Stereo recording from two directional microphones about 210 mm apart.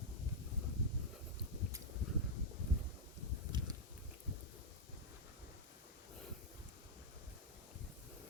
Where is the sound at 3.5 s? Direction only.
20° right (ahead or behind).